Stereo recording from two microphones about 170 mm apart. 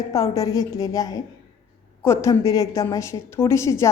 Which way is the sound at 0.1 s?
20° left (ahead or behind).